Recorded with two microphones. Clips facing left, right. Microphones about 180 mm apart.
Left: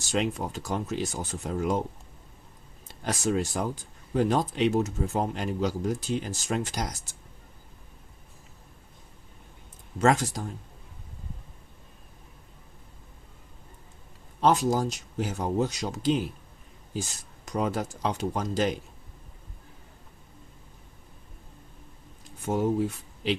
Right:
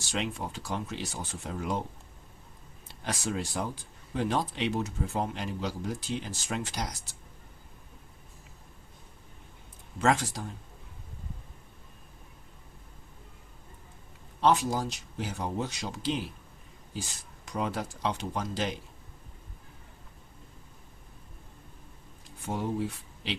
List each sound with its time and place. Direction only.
0.1 s speech: 45° left (ahead or behind)
2.8 s speech: 45° left (ahead or behind)
10.0 s speech: 45° left (ahead or behind)
14.4 s speech: 45° left (ahead or behind)